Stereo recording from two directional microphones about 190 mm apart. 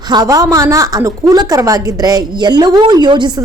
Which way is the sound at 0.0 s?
20° right (ahead or behind).